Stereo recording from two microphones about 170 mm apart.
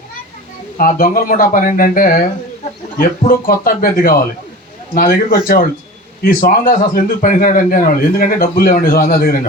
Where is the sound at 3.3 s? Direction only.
55° left (ahead or behind).